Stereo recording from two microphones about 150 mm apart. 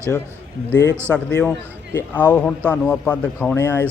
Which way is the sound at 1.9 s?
10° left (ahead or behind).